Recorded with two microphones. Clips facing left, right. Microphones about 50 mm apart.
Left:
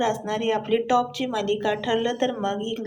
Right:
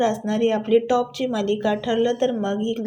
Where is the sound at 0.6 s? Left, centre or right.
Left; by 2.2 s centre.